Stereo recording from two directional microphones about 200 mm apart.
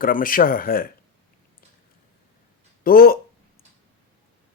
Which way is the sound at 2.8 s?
50° left (ahead or behind).